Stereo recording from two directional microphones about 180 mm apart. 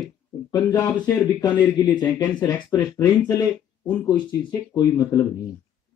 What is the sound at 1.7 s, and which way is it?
Speech, 25° left (ahead or behind).